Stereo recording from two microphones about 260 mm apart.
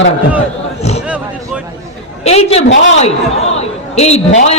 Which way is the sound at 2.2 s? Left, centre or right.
Left.